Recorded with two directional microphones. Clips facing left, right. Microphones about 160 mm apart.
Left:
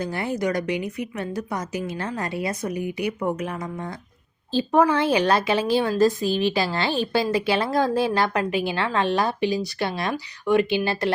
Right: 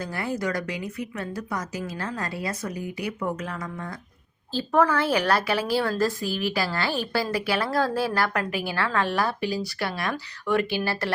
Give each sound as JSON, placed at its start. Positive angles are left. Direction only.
{"t": 0.0, "sound": "a woman's voice", "side_deg": 20}